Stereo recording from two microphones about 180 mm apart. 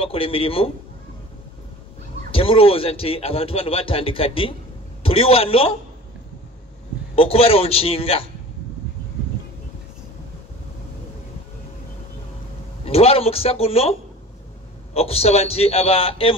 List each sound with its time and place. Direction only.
0.0 s speech: 30° left (ahead or behind)
2.3 s speech: 30° left (ahead or behind)
7.2 s speech: 35° left (ahead or behind)
12.8 s speech: 35° left (ahead or behind)
15.0 s speech: 35° left (ahead or behind)